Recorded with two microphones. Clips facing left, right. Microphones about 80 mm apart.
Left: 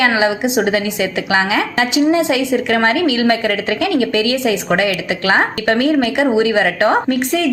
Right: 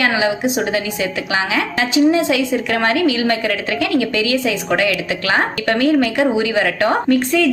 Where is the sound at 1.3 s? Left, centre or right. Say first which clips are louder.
Left 4 dB; left.